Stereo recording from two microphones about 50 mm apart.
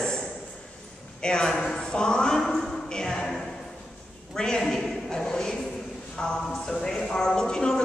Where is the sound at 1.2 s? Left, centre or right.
Centre.